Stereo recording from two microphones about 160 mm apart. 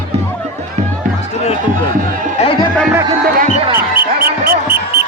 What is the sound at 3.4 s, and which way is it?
Music, 40° right (ahead or behind).